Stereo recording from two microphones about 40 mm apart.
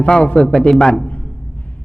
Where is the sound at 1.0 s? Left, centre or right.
Left.